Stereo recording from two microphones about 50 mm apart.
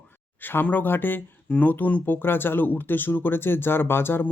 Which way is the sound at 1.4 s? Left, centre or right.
Left.